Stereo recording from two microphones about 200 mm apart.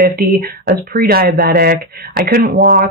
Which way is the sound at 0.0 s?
50° right (ahead or behind).